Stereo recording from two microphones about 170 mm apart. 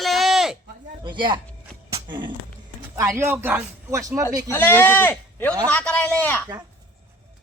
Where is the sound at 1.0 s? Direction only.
25° right (ahead or behind).